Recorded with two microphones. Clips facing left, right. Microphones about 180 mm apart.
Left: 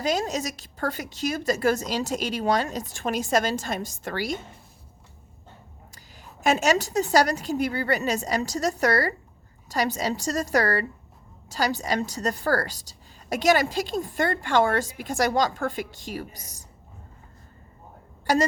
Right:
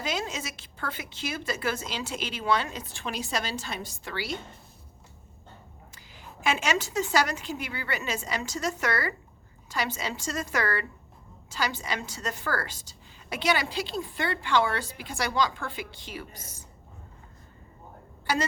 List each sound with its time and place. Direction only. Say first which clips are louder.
0.0 s a woman's voice: left 7 dB; 40° left (ahead or behind)
6.4 s a woman's voice: left 6 dB; 40° left (ahead or behind)